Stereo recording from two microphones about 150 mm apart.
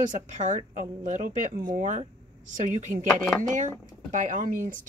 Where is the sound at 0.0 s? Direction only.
55° right (ahead or behind).